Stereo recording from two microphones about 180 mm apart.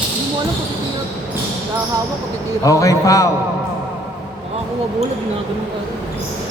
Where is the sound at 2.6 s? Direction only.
20° left (ahead or behind).